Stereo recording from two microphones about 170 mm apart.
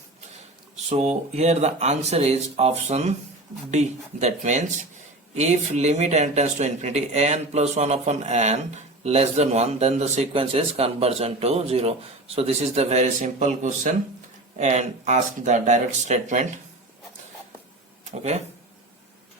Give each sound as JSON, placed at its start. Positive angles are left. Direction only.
{"t": 0.9, "sound": "speech", "side_deg": -40}
{"t": 18.0, "sound": "speech", "side_deg": -40}